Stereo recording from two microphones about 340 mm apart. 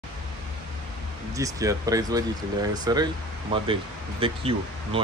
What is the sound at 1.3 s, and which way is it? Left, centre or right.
Speech, centre.